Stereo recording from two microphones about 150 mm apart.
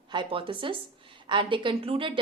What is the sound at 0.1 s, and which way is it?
A woman's voice, 35° right (ahead or behind).